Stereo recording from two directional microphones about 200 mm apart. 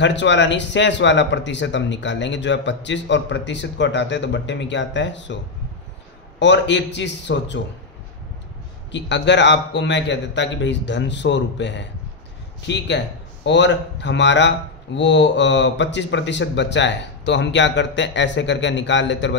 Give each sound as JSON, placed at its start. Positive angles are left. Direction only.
{"t": 0.0, "sound": "speech", "side_deg": 65}
{"t": 6.4, "sound": "speech", "side_deg": 65}
{"t": 8.9, "sound": "speech", "side_deg": 60}